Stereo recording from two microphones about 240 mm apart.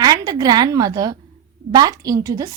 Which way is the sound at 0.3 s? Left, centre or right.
Centre.